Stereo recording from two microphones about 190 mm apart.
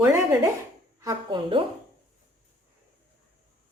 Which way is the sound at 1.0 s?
20° right (ahead or behind).